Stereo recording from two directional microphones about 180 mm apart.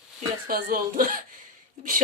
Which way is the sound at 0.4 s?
50° right (ahead or behind).